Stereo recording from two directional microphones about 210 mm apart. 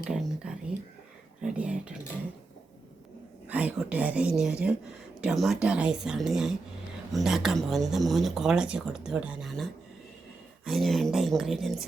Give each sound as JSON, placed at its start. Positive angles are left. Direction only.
{"t": 0.1, "sound": "speech", "side_deg": -5}
{"t": 3.5, "sound": "speech", "side_deg": -5}
{"t": 10.7, "sound": "speech", "side_deg": 0}